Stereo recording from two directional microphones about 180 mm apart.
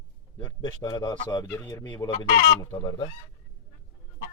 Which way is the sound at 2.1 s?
45° left (ahead or behind).